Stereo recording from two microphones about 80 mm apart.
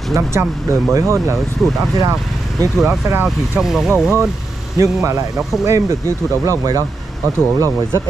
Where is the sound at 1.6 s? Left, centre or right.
Centre.